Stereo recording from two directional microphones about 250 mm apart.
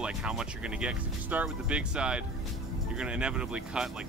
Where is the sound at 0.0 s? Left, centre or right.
Centre.